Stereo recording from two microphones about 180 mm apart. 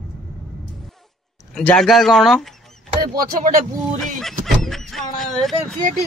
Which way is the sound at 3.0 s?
55° right (ahead or behind).